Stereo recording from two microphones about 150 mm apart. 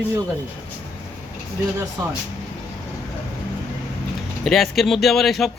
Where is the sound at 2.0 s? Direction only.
25° right (ahead or behind).